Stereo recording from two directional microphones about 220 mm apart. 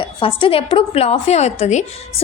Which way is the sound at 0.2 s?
25° left (ahead or behind).